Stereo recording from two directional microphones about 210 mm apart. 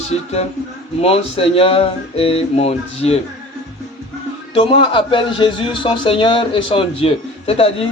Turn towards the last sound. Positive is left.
turn(degrees=30)  # may be behind; listen again after turning